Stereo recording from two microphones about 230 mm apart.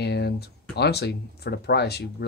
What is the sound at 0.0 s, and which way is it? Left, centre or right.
Speech, left.